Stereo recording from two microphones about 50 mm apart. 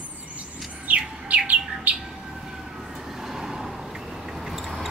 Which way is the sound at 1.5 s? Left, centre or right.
Centre.